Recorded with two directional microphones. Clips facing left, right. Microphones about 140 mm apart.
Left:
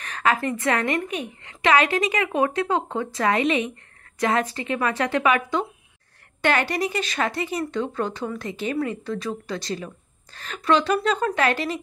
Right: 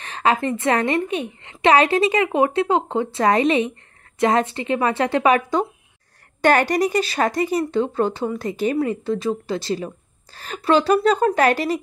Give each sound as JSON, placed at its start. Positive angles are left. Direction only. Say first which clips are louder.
{"t": 0.0, "sound": "a woman's voice", "louder": "right 3 dB", "side_deg": -30}